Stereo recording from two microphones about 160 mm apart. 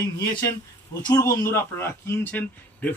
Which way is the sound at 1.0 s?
20° left (ahead or behind).